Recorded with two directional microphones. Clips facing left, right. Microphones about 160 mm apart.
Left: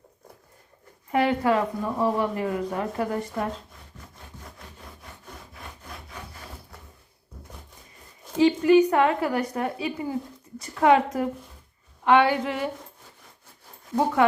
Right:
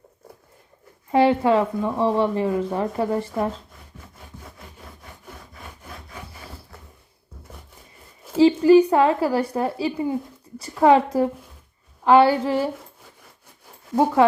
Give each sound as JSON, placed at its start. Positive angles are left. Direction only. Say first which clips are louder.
{"t": 1.1, "sound": "speech", "louder": "right 5 dB", "side_deg": -25}
{"t": 5.5, "sound": "sawing", "louder": "right 1 dB", "side_deg": 0}
{"t": 8.4, "sound": "a woman's voice", "louder": "right 4 dB", "side_deg": -30}